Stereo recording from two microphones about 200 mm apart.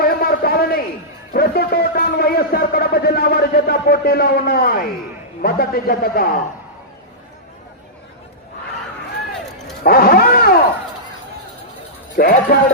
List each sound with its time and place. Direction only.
0.0 s a sound: 50° left (ahead or behind)
1.3 s a man's voice: 50° left (ahead or behind)
9.8 s roaring cats: 50° left (ahead or behind)
12.1 s a man's voice: 45° left (ahead or behind)